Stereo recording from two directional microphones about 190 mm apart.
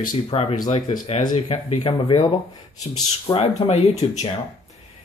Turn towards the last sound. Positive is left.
turn(degrees=35)  # may be behind; listen again after turning